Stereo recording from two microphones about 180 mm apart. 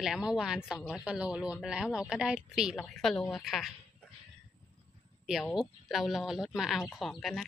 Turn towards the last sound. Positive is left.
turn(degrees=0)  # may be behind; listen again after turning